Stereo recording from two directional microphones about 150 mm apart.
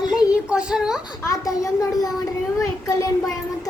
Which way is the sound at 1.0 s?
25° left (ahead or behind).